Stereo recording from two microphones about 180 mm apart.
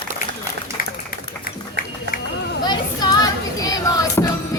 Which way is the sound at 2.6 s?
25° left (ahead or behind).